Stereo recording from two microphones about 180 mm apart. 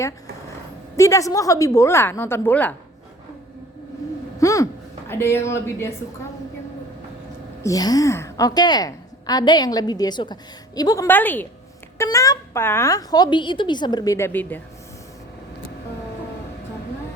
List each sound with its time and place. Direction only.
0.9 s a woman's voice: 15° left (ahead or behind)
4.4 s a woman's voice: 20° left (ahead or behind)
7.6 s a woman's voice: 20° left (ahead or behind)